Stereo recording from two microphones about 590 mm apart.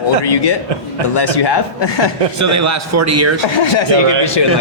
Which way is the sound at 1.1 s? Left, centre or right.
Left.